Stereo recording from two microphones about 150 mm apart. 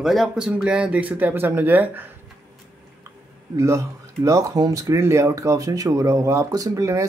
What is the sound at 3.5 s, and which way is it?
Speech, 20° right (ahead or behind).